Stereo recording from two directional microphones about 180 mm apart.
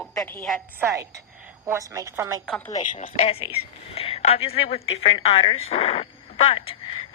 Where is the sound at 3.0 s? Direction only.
30° left (ahead or behind).